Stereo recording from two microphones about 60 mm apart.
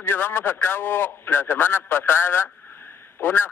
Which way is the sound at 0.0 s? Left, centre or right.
Left.